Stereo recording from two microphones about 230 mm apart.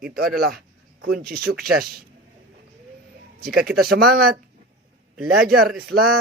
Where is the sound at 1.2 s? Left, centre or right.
Right.